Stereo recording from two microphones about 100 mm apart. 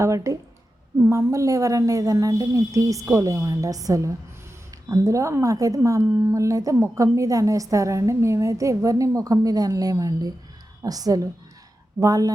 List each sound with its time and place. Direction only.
0.0 s a woman's voice: 35° right (ahead or behind)